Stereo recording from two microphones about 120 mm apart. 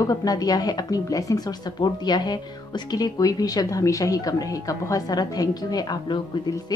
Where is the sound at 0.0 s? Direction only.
30° left (ahead or behind).